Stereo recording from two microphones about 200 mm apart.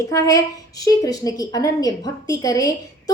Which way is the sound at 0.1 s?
15° left (ahead or behind).